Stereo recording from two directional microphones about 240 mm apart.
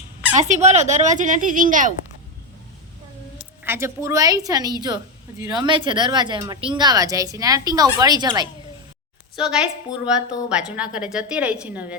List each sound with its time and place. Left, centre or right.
0.3 s fowl: right
3.6 s speech: centre
9.3 s a woman's voice: centre